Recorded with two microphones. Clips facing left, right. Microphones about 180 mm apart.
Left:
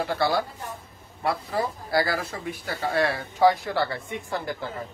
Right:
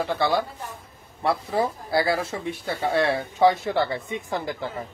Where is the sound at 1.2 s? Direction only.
25° right (ahead or behind).